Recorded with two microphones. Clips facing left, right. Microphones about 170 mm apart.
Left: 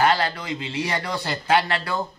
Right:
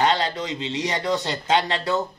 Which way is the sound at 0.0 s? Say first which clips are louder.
Left 1 dB; 20° right (ahead or behind).